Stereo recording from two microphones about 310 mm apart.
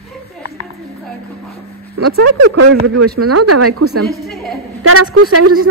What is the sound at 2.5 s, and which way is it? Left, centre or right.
A man's voice, right.